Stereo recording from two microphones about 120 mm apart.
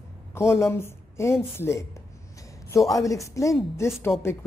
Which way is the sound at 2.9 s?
25° left (ahead or behind).